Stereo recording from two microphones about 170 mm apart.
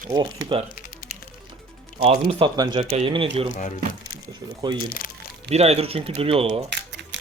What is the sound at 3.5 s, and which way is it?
Speech, 50° left (ahead or behind).